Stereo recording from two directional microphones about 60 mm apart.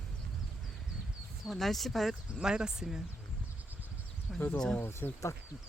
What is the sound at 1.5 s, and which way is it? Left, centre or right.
Speech, centre.